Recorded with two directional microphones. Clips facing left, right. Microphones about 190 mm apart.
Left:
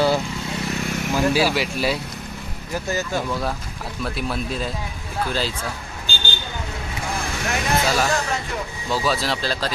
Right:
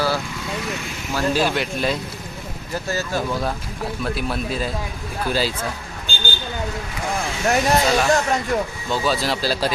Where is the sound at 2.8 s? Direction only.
20° left (ahead or behind).